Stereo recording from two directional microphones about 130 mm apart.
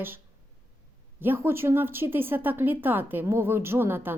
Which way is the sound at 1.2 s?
15° right (ahead or behind).